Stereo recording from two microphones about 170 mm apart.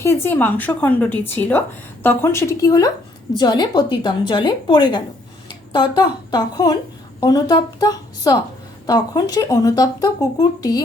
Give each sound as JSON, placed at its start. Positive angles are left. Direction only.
{"t": 0.0, "sound": "speech", "side_deg": 15}